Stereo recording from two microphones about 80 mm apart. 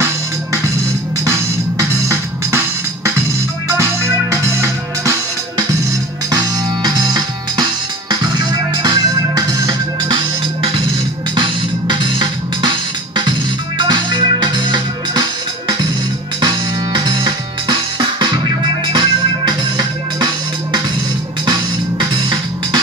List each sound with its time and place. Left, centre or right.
2.0 s music: right
6.3 s music: right
10.0 s music: right
16.3 s music: right
21.5 s music: right